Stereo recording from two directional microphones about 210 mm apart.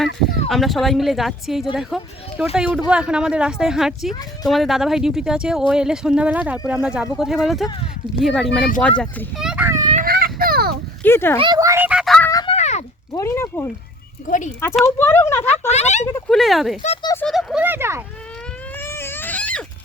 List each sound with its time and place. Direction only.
0.0 s a child's voice: centre (ahead or behind)
9.9 s a sound: 45° right (ahead or behind)
11.0 s speech: 10° left (ahead or behind)
11.3 s speech: 20° right (ahead or behind); by 12.3 s centre (ahead or behind)
12.3 s a sound: 20° left (ahead or behind)
12.5 s a sound: 30° left (ahead or behind)
13.1 s speech: 15° left (ahead or behind)
14.3 s speech: 35° left (ahead or behind)
14.8 s speech: 10° left (ahead or behind)
15.4 s speech: 30° left (ahead or behind)
16.3 s speech: centre (ahead or behind)
17.0 s speech: 15° left (ahead or behind)
17.2 s speech: centre (ahead or behind)
18.8 s baby cry: 10° left (ahead or behind)